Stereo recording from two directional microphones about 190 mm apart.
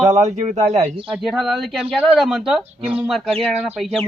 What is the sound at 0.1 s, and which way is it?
A man's voice, 35° right (ahead or behind).